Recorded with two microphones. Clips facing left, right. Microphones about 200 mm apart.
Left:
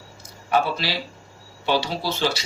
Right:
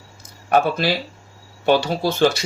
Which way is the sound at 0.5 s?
50° right (ahead or behind).